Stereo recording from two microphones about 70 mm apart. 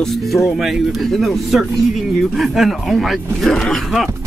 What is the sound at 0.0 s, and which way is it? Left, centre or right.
Speech, centre.